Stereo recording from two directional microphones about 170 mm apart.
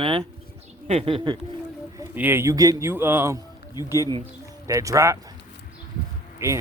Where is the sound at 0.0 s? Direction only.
30° right (ahead or behind).